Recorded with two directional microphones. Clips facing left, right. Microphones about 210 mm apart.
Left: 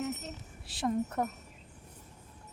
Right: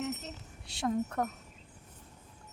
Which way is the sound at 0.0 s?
Centre (ahead or behind).